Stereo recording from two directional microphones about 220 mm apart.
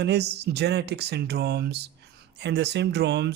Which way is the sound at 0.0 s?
50° right (ahead or behind).